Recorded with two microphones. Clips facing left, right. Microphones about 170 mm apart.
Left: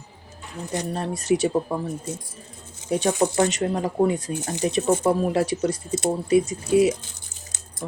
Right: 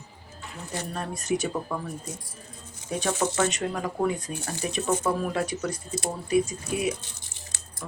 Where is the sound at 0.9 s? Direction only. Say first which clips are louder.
Left 5 dB; 30° left (ahead or behind).